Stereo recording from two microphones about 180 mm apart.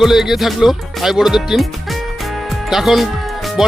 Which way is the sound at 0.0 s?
Centre (ahead or behind).